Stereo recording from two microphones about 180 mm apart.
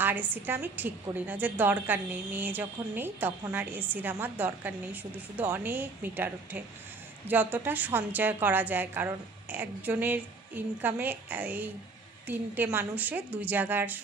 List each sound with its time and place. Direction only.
0.0 s a woman's voice: 10° right (ahead or behind)